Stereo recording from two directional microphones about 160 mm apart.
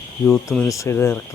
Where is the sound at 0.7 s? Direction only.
20° left (ahead or behind).